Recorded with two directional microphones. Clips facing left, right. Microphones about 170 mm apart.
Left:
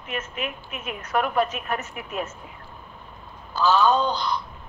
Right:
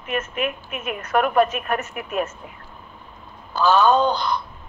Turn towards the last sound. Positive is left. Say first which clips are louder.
# right 4 dB
turn(degrees=-55)  # may be behind; listen again after turning